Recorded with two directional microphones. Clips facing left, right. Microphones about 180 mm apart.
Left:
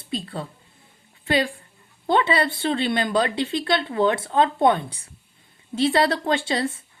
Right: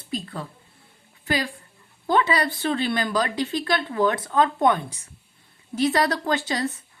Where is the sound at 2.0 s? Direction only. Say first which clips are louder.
Left 1 dB; 25° left (ahead or behind).